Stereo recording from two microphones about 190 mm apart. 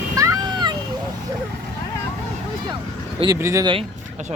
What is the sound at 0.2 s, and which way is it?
Cat, 20° right (ahead or behind).